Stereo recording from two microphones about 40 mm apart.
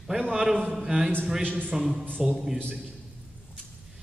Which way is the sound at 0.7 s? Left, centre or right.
Centre.